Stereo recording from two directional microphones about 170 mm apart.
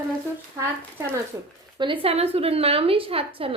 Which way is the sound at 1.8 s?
30° right (ahead or behind).